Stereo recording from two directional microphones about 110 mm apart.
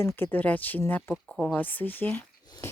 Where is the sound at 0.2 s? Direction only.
15° left (ahead or behind).